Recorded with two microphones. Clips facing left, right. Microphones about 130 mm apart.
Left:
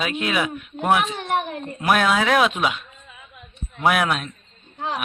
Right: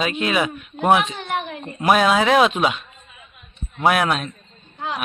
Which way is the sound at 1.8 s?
5° right (ahead or behind).